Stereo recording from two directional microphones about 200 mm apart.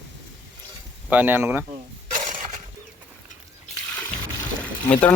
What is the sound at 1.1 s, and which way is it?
Speech, 10° right (ahead or behind).